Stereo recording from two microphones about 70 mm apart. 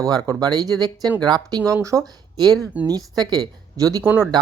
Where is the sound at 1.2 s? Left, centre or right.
Right.